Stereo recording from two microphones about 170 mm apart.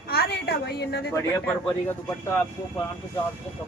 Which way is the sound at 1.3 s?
10° left (ahead or behind).